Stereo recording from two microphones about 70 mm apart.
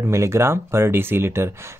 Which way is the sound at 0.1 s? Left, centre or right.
Right.